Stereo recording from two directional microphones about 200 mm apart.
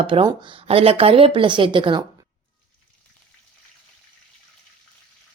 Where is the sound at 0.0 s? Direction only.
25° right (ahead or behind).